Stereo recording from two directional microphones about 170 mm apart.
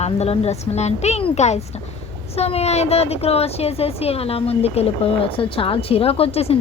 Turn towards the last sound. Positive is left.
turn(degrees=35)  # may be behind; listen again after turning